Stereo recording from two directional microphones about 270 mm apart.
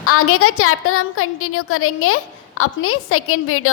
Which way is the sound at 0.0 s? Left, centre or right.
Left.